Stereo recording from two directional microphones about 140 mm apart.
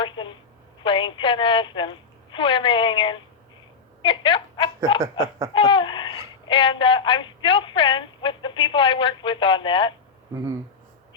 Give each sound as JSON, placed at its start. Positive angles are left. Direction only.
{"t": 0.0, "sound": "telephone", "side_deg": 35}
{"t": 0.8, "sound": "a woman's voice", "side_deg": 35}
{"t": 5.5, "sound": "a sound", "side_deg": 35}
{"t": 6.5, "sound": "speech", "side_deg": 40}